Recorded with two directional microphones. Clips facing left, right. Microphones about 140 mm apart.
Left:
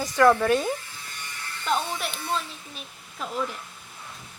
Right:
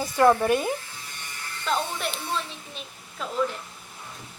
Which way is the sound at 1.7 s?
Centre (ahead or behind).